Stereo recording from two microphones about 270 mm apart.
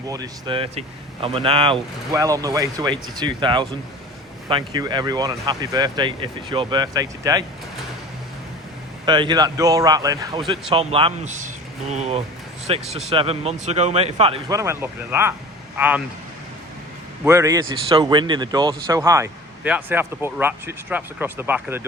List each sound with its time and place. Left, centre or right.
0.1 s speech: centre
9.0 s speech: centre
17.2 s speech: centre